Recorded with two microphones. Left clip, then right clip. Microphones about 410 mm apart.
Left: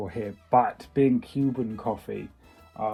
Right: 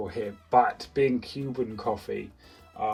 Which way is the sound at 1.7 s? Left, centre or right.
Centre.